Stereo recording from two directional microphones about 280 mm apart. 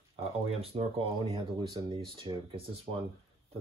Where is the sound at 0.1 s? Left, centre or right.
Right.